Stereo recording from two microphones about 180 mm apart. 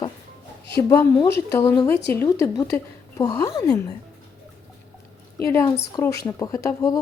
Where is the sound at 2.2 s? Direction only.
15° left (ahead or behind).